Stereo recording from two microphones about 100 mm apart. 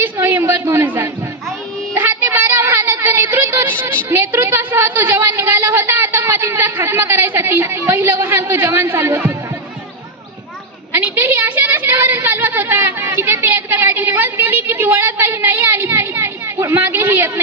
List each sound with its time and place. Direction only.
0.0 s a sound: 20° right (ahead or behind)
4.1 s a woman's voice: 25° right (ahead or behind)
10.9 s a woman's voice: 20° right (ahead or behind)